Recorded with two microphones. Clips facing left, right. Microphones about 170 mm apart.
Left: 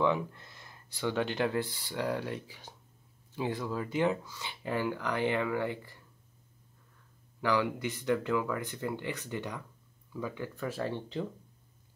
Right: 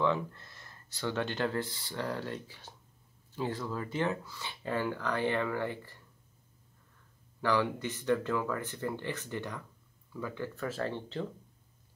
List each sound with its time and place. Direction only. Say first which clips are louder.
0.0 s speech: left 1 dB; 15° left (ahead or behind)
7.4 s speech: even; 10° left (ahead or behind)